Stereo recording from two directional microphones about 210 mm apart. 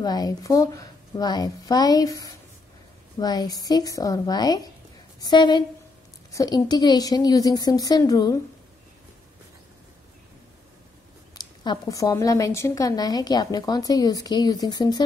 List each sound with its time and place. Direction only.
0.0 s a woman's voice: 20° left (ahead or behind)
11.3 s a woman's voice: 20° left (ahead or behind)